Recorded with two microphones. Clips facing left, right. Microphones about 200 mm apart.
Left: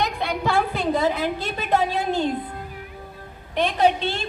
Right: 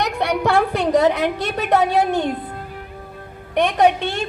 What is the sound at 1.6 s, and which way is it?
Speech, 70° right (ahead or behind).